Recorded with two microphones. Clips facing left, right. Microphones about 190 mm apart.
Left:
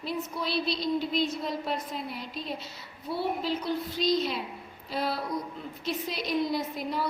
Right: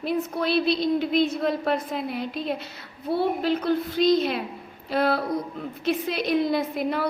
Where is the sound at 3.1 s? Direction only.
60° right (ahead or behind).